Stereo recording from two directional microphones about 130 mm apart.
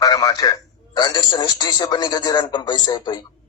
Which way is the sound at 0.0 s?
30° left (ahead or behind).